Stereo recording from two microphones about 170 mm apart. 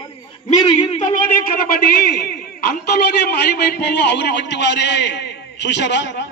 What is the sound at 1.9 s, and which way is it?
A man's voice, 65° left (ahead or behind).